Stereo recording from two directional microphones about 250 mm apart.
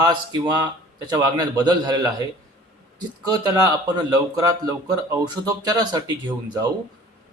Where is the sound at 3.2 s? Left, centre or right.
Centre.